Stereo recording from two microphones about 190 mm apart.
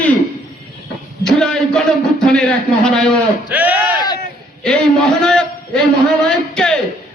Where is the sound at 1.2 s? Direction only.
5° left (ahead or behind).